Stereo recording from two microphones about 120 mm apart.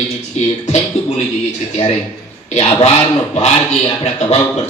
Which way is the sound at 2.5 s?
60° left (ahead or behind).